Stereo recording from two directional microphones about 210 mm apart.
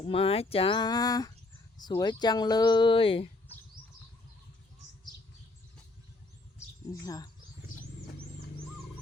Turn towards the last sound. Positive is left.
turn(degrees=15)  # may be behind; listen again after turning